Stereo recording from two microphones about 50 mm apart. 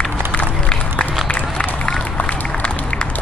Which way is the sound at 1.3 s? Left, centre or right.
Left.